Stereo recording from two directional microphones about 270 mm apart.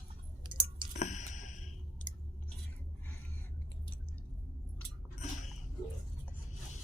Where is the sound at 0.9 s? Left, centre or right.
Left.